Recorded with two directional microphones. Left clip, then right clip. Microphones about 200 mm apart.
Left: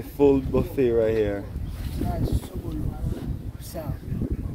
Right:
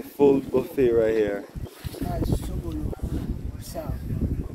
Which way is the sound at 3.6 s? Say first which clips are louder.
Right 1 dB; 5° left (ahead or behind).